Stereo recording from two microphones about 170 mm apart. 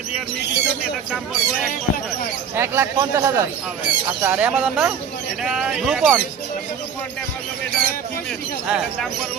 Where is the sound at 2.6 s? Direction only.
15° right (ahead or behind).